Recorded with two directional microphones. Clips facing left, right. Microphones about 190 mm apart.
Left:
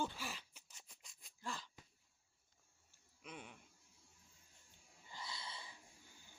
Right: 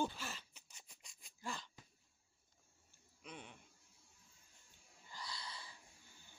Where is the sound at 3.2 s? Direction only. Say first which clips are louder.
Even; 5° left (ahead or behind).